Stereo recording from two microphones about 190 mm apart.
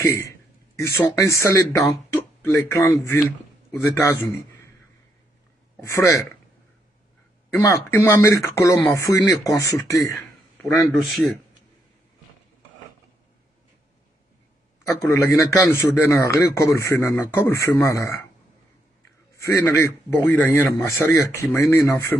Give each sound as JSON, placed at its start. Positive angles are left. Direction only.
{"t": 0.0, "sound": "a man's voice", "side_deg": 15}
{"t": 5.8, "sound": "a man's voice", "side_deg": 15}
{"t": 7.5, "sound": "a man's voice", "side_deg": 10}
{"t": 10.6, "sound": "a man's voice", "side_deg": 0}
{"t": 14.9, "sound": "a man's voice", "side_deg": 15}
{"t": 19.3, "sound": "a man's voice", "side_deg": 15}